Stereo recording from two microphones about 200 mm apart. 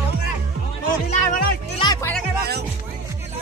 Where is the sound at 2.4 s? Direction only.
55° right (ahead or behind).